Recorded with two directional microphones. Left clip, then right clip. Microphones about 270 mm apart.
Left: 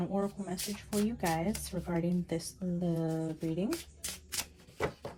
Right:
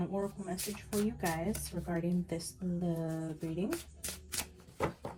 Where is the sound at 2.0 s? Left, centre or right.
Left.